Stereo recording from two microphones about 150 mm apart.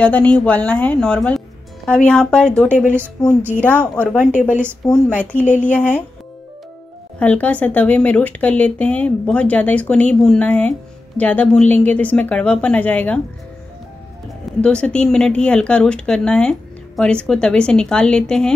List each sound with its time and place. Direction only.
0.0 s speech: 10° left (ahead or behind)
4.3 s speech: 55° left (ahead or behind)
4.8 s speech: 5° left (ahead or behind)
7.2 s speech: 10° left (ahead or behind)
14.6 s speech: 5° left (ahead or behind)